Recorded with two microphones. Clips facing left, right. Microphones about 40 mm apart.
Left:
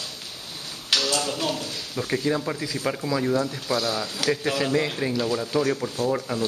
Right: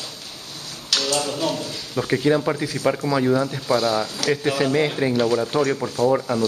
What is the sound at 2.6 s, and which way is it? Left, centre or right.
Speech, right.